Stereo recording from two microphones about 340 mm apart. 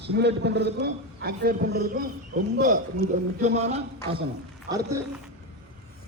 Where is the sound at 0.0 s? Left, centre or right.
Right.